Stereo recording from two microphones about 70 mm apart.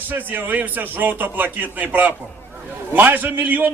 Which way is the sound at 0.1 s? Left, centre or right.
Right.